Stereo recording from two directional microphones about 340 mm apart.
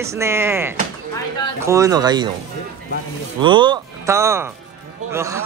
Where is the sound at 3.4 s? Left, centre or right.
Centre.